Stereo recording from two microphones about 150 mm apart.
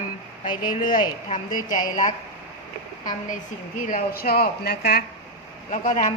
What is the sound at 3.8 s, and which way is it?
Speech, 70° left (ahead or behind).